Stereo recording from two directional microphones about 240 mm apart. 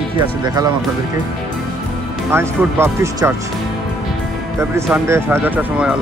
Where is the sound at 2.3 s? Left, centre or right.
Centre.